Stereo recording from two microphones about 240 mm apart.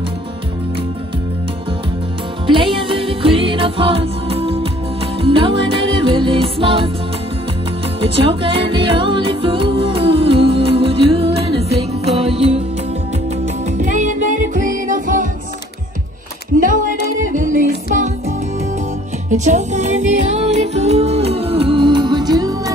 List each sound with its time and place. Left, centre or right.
2.4 s music: right
8.0 s music: right
13.7 s music: right
16.5 s music: right
19.3 s music: right